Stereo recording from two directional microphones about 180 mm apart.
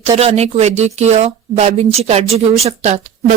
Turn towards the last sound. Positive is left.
turn(degrees=-35)  # may be behind; listen again after turning